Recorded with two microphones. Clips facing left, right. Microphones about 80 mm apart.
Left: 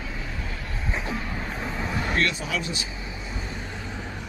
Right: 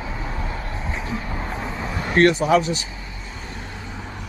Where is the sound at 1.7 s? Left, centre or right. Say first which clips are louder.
Right 6 dB; centre.